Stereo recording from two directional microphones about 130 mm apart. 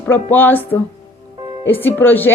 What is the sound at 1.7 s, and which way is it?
Speech, 15° left (ahead or behind).